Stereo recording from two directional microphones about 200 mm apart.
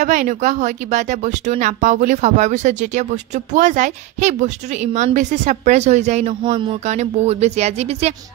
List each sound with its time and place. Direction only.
0.0 s speech: 40° right (ahead or behind)